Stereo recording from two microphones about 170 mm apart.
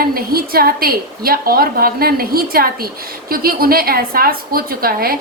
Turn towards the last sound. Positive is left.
turn(degrees=-60)  # may be behind; listen again after turning